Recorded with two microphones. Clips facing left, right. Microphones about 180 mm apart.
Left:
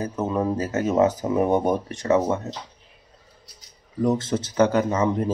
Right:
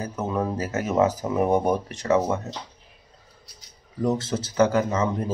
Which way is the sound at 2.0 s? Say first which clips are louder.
Left 2 dB; 25° left (ahead or behind).